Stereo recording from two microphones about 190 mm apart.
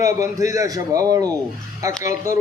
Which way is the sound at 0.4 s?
15° right (ahead or behind).